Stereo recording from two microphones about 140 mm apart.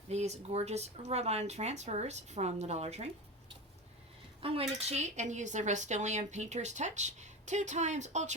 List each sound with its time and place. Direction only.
0.1 s speech: 50° right (ahead or behind)
4.4 s speech: 40° right (ahead or behind)
4.8 s speech: 50° right (ahead or behind)